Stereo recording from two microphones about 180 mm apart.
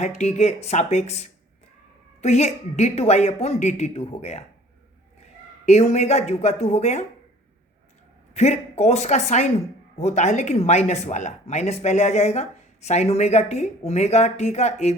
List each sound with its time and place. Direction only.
0.0 s speech: 40° left (ahead or behind)
5.6 s speech: 40° left (ahead or behind)
8.3 s speech: 35° left (ahead or behind)